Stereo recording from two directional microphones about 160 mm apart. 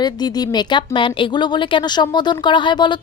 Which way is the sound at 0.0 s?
25° left (ahead or behind).